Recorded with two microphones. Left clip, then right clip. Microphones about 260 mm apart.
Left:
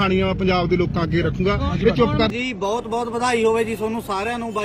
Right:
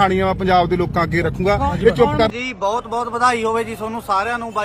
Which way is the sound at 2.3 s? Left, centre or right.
Centre.